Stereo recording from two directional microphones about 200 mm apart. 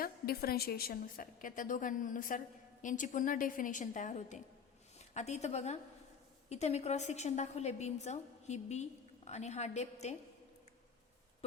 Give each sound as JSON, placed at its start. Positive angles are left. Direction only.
{"t": 0.0, "sound": "a woman's voice", "side_deg": 50}